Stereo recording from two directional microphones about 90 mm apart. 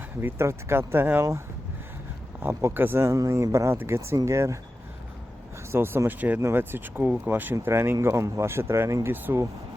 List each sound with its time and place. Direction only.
0.2 s speech: 25° right (ahead or behind)
2.4 s speech: 30° right (ahead or behind)
5.7 s speech: 25° right (ahead or behind)